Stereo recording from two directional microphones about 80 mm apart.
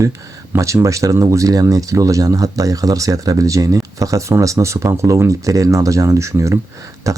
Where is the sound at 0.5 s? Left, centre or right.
Right.